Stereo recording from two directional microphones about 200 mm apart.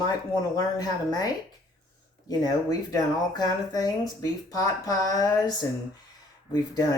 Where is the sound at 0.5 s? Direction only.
20° left (ahead or behind).